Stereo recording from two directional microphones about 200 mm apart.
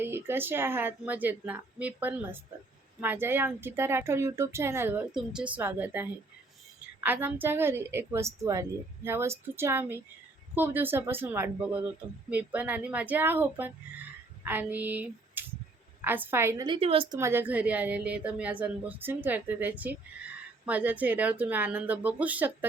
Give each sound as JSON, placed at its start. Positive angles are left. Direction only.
{"t": 0.0, "sound": "speech", "side_deg": -10}
{"t": 14.4, "sound": "female singing", "side_deg": -10}
{"t": 16.0, "sound": "speech", "side_deg": -10}
{"t": 16.7, "sound": "a woman's voice", "side_deg": -30}
{"t": 17.2, "sound": "speech", "side_deg": -10}